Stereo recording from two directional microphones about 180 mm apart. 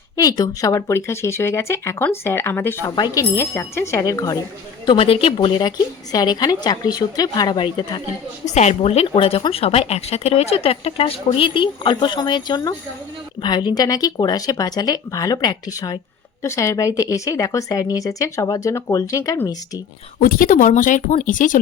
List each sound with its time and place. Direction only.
0.2 s speech: 20° left (ahead or behind)
4.9 s a woman's voice: 30° left (ahead or behind)
8.4 s a woman's voice: 40° left (ahead or behind); by 19.8 s 20° left (ahead or behind)
20.1 s speech: 50° left (ahead or behind)